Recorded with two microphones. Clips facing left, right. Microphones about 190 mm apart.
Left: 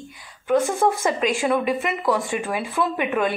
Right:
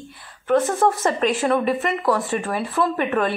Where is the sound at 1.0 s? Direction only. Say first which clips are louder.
Right 1 dB; 10° left (ahead or behind).